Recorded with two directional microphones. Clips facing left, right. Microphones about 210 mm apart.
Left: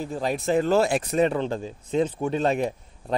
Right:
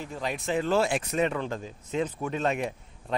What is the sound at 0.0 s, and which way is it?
Speech, 35° left (ahead or behind).